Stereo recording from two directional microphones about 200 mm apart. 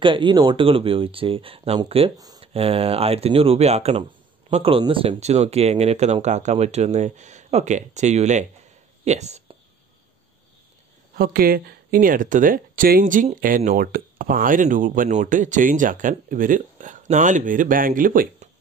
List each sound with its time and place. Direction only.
0.0 s speech: 25° right (ahead or behind)
11.1 s speech: 45° right (ahead or behind)